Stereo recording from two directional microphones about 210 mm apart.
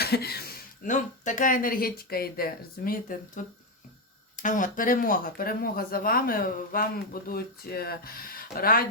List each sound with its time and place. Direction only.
0.0 s speech: 50° left (ahead or behind)
4.4 s speech: 40° left (ahead or behind)